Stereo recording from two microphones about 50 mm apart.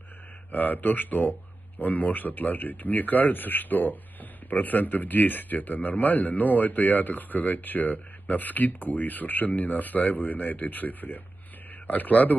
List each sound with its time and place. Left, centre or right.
0.5 s speech: left